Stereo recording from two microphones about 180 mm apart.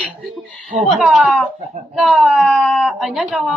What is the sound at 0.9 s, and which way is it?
A woman's voice, 5° right (ahead or behind).